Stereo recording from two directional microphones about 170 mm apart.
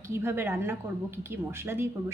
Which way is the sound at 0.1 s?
15° right (ahead or behind).